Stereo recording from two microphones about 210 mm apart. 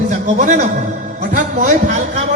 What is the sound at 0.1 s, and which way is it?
Music, 35° right (ahead or behind).